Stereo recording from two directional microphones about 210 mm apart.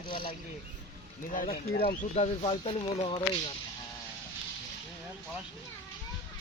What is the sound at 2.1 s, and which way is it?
Speech, 30° left (ahead or behind).